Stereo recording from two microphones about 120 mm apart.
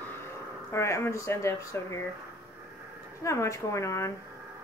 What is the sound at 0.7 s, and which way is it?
Speech, 25° left (ahead or behind).